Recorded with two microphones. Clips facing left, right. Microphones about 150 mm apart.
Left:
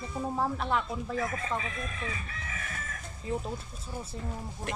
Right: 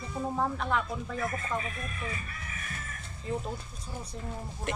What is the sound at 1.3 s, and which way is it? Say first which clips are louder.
Speech: even; 90° left.